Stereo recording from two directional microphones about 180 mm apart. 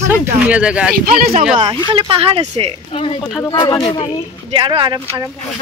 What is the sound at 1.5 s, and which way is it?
Speech, 25° right (ahead or behind).